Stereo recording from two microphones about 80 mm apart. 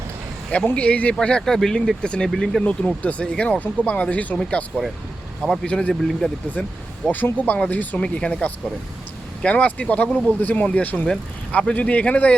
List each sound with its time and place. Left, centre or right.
0.6 s speech: centre
6.6 s speech: centre